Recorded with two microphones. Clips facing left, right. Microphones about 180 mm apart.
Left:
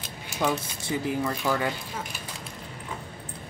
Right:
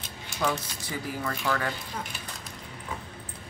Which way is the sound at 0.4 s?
20° left (ahead or behind).